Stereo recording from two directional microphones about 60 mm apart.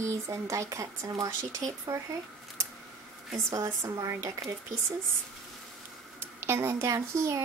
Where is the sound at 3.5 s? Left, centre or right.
Right.